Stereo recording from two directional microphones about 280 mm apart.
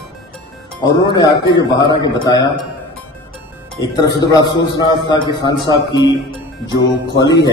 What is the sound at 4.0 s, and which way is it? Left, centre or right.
A man's voice, centre.